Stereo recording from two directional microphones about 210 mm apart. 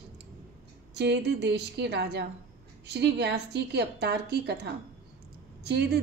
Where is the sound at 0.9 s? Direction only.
55° right (ahead or behind).